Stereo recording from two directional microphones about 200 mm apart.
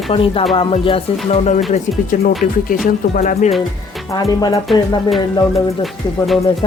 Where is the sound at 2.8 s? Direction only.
40° left (ahead or behind).